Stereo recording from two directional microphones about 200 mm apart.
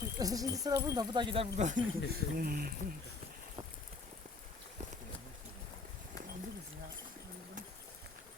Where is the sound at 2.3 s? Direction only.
50° right (ahead or behind).